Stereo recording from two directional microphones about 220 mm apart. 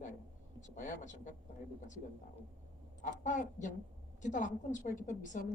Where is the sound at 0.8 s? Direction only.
35° left (ahead or behind).